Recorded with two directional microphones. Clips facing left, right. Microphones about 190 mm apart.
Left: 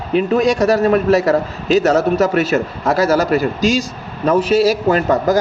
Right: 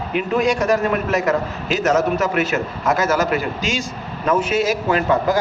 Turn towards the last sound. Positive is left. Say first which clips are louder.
# left 3 dB
turn(degrees=40)  # may be behind; listen again after turning